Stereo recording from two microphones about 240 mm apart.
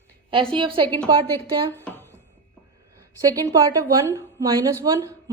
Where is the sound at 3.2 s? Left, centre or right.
Centre.